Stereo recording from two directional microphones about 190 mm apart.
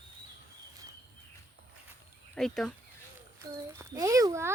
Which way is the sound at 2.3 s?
Centre (ahead or behind).